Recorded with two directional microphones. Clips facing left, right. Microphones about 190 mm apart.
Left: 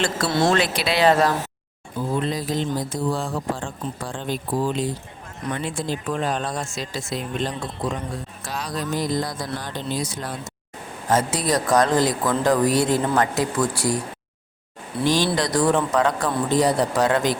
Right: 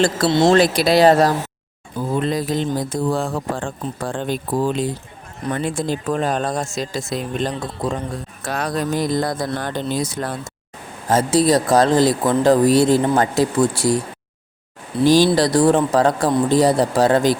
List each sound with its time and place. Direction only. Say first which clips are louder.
0.3 s speech: right 5 dB; 20° right (ahead or behind)
0.8 s speech: right 5 dB; 40° right (ahead or behind)
2.2 s speech: right 4 dB; 55° right (ahead or behind)
8.4 s speech: right 6 dB; 55° right (ahead or behind)
11.1 s speech: right 6 dB; 30° right (ahead or behind)
15.0 s speech: right 7 dB; 35° right (ahead or behind)